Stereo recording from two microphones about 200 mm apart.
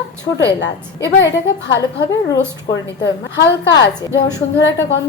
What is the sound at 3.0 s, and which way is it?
Speech, 60° left (ahead or behind).